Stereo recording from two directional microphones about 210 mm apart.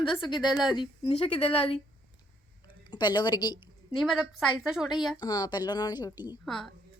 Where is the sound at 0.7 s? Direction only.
20° left (ahead or behind).